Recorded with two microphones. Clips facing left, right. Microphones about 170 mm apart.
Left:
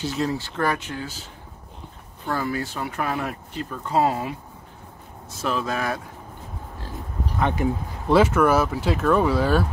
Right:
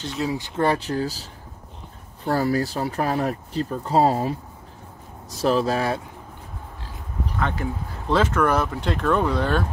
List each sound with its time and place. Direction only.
0.0 s speech: centre (ahead or behind)
0.3 s speech: 15° right (ahead or behind)
0.7 s speech: 35° right (ahead or behind)
2.2 s speech: 35° right (ahead or behind)
7.3 s speech: 15° left (ahead or behind)